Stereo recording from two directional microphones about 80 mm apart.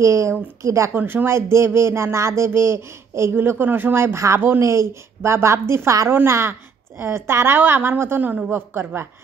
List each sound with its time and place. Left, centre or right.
0.0 s speech: right
0.9 s a woman's voice: right